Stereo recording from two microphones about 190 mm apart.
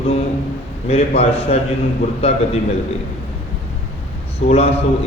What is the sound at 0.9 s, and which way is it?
A man's voice, 35° left (ahead or behind).